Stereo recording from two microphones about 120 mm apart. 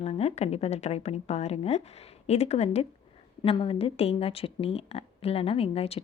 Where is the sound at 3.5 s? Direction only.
50° left (ahead or behind).